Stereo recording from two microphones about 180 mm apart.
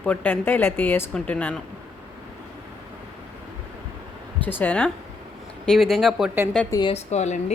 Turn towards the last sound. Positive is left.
turn(degrees=40)  # may be behind; listen again after turning